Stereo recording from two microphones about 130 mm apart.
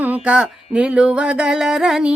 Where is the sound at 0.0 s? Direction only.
10° right (ahead or behind).